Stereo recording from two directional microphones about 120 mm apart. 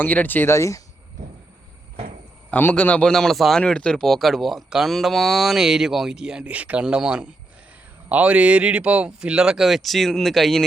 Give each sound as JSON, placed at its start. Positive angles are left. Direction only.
{"t": 0.0, "sound": "speech", "side_deg": 15}
{"t": 2.5, "sound": "a man's voice", "side_deg": 15}